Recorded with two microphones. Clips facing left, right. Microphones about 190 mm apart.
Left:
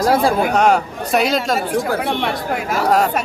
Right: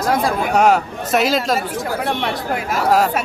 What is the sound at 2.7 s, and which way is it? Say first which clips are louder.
Speech: even; centre (ahead or behind).